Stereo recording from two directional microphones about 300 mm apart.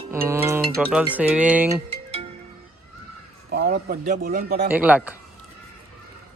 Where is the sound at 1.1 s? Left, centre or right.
Centre.